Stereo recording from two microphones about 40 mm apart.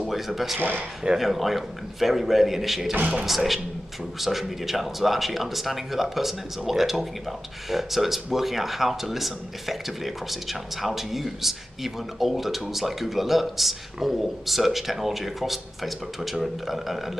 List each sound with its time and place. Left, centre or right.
0.0 s speech: centre
0.6 s speech: right
1.1 s speech: centre